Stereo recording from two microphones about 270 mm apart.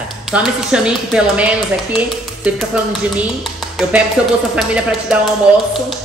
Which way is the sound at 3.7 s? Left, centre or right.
Centre.